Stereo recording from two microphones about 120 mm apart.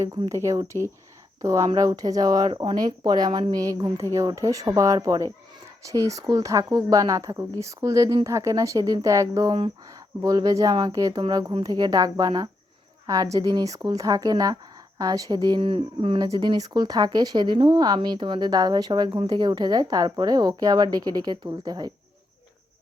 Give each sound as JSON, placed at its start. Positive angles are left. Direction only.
{"t": 0.0, "sound": "speech", "side_deg": -25}
{"t": 9.5, "sound": "speech", "side_deg": -40}
{"t": 10.2, "sound": "speech", "side_deg": -30}
{"t": 15.6, "sound": "speech", "side_deg": -50}